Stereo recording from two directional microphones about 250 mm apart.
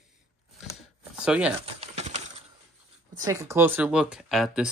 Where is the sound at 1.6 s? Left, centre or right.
Right.